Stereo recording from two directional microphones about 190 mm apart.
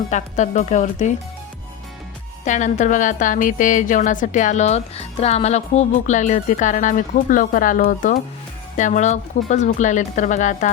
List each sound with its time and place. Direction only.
0.1 s a woman's voice: 40° left (ahead or behind)
2.4 s a woman's voice: 40° left (ahead or behind)